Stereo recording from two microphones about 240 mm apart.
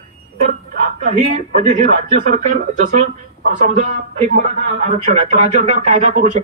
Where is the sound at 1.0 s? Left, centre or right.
Right.